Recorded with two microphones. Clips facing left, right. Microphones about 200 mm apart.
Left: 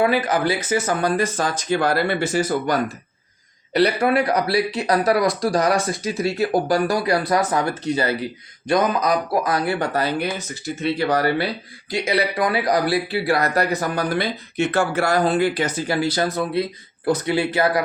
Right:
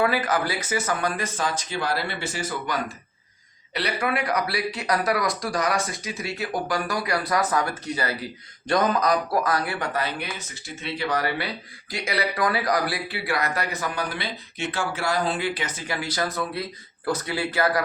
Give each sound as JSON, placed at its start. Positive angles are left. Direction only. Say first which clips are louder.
{"t": 0.0, "sound": "speech", "louder": "left 4 dB", "side_deg": 20}
{"t": 8.6, "sound": "a man's voice", "louder": "left 3 dB", "side_deg": 15}
{"t": 9.6, "sound": "speech", "louder": "left 6 dB", "side_deg": 35}